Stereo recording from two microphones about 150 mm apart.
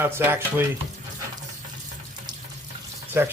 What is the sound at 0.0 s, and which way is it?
Speech, 15° right (ahead or behind).